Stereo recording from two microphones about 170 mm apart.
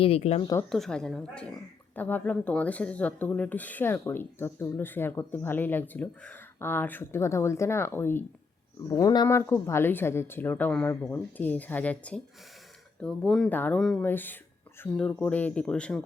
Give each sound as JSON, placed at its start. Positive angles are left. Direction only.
{"t": 0.0, "sound": "speech", "side_deg": 40}
{"t": 0.7, "sound": "a woman's voice", "side_deg": 5}